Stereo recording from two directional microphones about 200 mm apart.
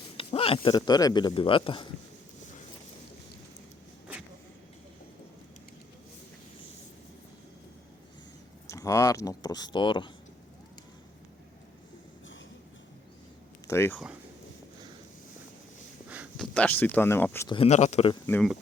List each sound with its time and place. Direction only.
0.2 s speech: 30° left (ahead or behind)
8.7 s speech: 15° left (ahead or behind)
13.7 s speech: 10° left (ahead or behind)
16.0 s a sound: 5° right (ahead or behind)
16.6 s speech: 10° left (ahead or behind)
17.5 s speech: 30° left (ahead or behind)
18.3 s speech: 5° left (ahead or behind)